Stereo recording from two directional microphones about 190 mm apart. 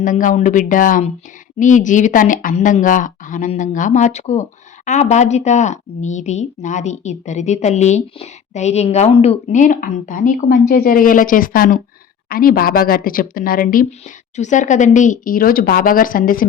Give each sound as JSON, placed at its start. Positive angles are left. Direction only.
{"t": 0.0, "sound": "a woman's voice", "side_deg": 45}